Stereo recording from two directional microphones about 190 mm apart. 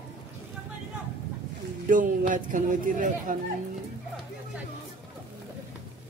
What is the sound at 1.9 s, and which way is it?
Speech, 45° right (ahead or behind).